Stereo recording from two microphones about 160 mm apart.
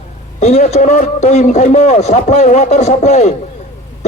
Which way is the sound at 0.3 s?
45° left (ahead or behind).